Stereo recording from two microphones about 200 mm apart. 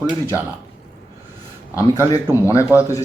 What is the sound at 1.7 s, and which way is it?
Speech, 15° left (ahead or behind).